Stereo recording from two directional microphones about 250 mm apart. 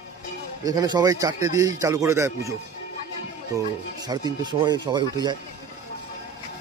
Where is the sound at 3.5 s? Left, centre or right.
Centre.